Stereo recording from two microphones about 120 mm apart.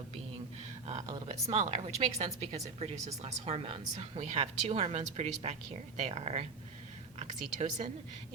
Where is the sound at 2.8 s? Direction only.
60° right (ahead or behind).